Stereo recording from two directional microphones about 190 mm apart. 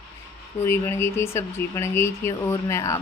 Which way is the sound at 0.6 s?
15° left (ahead or behind).